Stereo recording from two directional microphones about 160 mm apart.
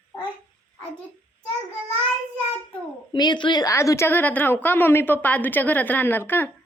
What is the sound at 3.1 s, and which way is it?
A woman's voice, 25° left (ahead or behind).